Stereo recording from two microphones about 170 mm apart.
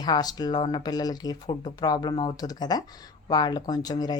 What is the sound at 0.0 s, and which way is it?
Speech, 25° left (ahead or behind).